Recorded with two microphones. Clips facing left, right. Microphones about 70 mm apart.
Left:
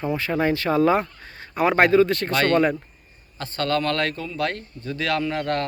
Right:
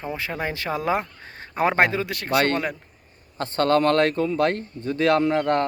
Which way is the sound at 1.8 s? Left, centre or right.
Centre.